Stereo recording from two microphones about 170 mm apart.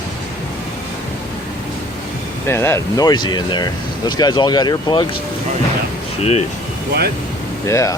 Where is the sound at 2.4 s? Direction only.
15° left (ahead or behind).